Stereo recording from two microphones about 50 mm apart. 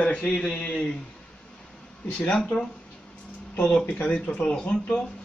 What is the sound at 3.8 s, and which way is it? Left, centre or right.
Speech, left.